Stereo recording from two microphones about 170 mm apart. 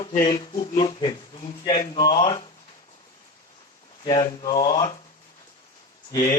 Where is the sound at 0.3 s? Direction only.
35° left (ahead or behind).